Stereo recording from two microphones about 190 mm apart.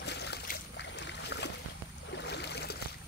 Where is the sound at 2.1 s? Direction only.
65° left (ahead or behind).